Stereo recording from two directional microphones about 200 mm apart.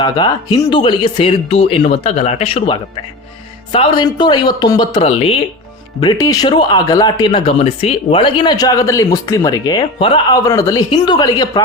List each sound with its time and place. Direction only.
0.0 s speech: 20° left (ahead or behind)